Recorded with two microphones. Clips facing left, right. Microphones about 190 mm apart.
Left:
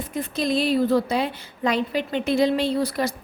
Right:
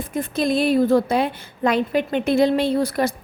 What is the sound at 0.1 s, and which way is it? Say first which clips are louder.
A woman's voice: right 3 dB; 50° right (ahead or behind).